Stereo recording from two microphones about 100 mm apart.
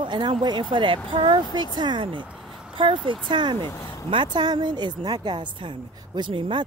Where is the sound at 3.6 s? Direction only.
30° left (ahead or behind).